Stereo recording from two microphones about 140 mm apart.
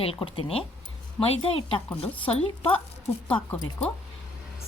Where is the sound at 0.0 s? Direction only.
40° left (ahead or behind).